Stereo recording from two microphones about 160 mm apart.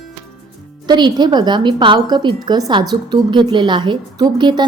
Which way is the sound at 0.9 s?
25° right (ahead or behind).